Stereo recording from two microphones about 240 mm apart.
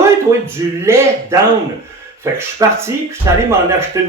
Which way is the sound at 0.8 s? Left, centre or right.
Centre.